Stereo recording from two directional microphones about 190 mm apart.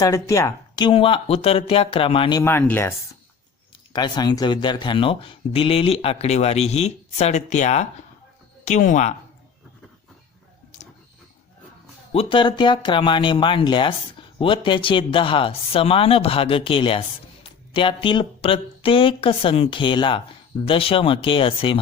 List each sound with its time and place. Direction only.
0.0 s speech: 15° left (ahead or behind)
2.4 s speech: 10° left (ahead or behind)
3.9 s speech: 20° left (ahead or behind); by 9.1 s 40° left (ahead or behind)
12.1 s speech: 30° left (ahead or behind)